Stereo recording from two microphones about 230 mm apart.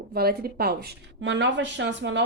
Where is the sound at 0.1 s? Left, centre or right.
Right.